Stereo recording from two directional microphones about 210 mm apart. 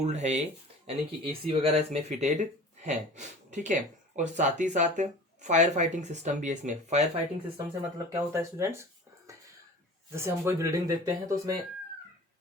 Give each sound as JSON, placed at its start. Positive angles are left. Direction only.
{"t": 0.0, "sound": "speech", "side_deg": -30}
{"t": 7.5, "sound": "speech", "side_deg": -15}